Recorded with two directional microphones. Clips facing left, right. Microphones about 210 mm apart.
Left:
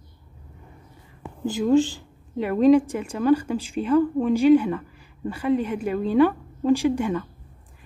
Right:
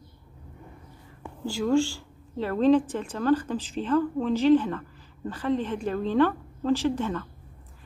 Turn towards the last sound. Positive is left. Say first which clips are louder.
# left 4 dB
turn(degrees=15)  # may be behind; listen again after turning